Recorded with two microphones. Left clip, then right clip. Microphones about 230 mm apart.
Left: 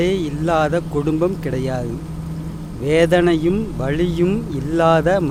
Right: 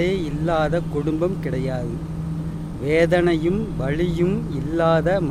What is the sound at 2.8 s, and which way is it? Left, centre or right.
Speech, centre.